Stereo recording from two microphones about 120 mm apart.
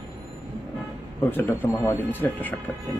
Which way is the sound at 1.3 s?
20° left (ahead or behind).